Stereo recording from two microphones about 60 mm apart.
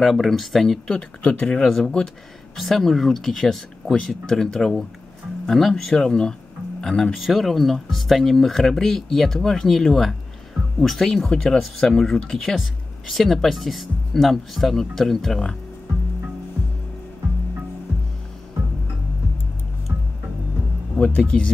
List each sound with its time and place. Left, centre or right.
0.0 s speech: centre
2.5 s speech: centre
21.0 s speech: centre